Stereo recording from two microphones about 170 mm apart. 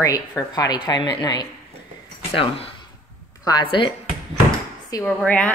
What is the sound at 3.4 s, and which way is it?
Speech, 25° left (ahead or behind).